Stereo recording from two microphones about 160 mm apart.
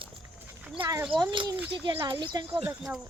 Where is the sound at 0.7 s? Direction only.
25° right (ahead or behind).